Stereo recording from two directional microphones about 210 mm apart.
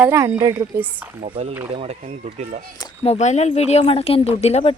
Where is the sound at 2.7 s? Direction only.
25° left (ahead or behind).